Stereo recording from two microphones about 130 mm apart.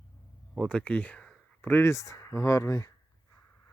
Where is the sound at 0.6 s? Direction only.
10° left (ahead or behind); by 2.9 s 25° left (ahead or behind).